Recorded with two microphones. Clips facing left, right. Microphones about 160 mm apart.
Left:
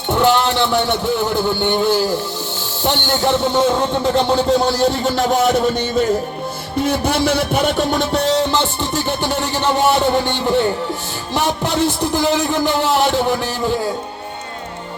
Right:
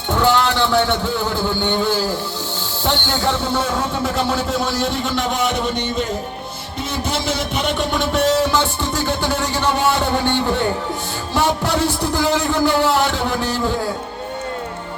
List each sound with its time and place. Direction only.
0.1 s a man's voice: 20° left (ahead or behind); by 6.1 s 45° left (ahead or behind)
6.8 s speech: 60° left (ahead or behind); by 8.2 s 40° left (ahead or behind)
8.8 s music: 20° left (ahead or behind)
9.8 s speech: 20° left (ahead or behind)